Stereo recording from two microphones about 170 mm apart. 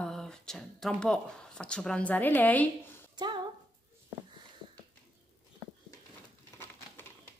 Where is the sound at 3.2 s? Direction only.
25° right (ahead or behind).